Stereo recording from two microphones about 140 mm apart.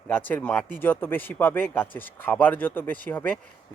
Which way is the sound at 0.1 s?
15° left (ahead or behind).